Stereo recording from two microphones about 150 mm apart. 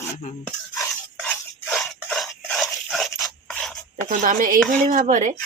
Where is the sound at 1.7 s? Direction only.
Centre (ahead or behind).